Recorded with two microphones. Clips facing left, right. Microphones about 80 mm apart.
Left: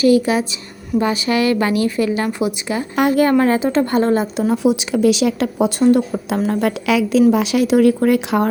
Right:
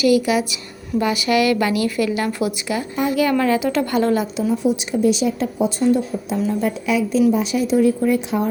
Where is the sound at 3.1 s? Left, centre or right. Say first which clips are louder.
Left 3 dB; left.